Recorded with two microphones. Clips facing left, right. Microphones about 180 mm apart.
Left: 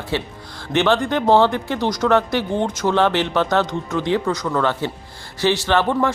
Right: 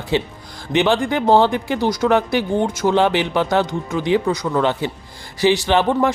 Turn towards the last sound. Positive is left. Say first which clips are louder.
# right 2 dB
turn(degrees=-15)  # may be behind; listen again after turning